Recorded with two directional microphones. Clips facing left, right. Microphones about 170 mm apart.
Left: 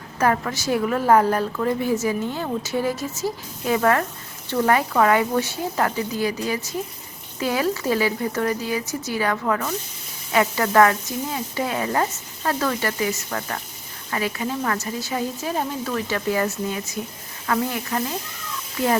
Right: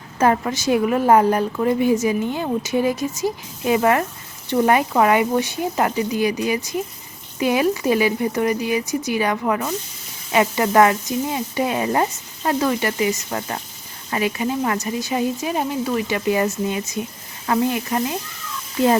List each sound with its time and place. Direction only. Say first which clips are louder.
0.2 s a woman's voice: right 3 dB; 20° right (ahead or behind)